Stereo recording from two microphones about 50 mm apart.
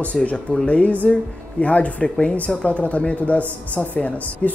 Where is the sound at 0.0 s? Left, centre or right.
Left.